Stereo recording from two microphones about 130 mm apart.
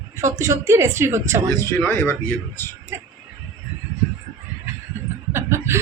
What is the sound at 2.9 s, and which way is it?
Speech, 20° right (ahead or behind).